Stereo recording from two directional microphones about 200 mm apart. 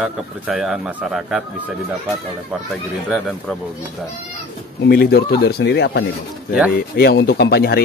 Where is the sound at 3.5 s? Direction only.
5° left (ahead or behind).